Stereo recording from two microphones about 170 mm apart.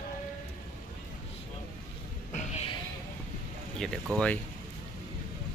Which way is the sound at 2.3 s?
45° left (ahead or behind).